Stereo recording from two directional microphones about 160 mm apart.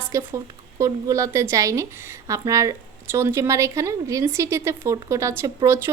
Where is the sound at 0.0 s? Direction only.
15° right (ahead or behind).